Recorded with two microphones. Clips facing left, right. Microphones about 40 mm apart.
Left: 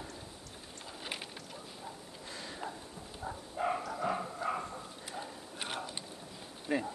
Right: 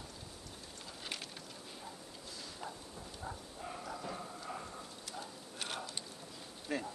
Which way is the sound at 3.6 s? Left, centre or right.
Left.